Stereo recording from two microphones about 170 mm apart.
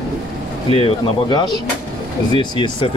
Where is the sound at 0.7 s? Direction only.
30° left (ahead or behind).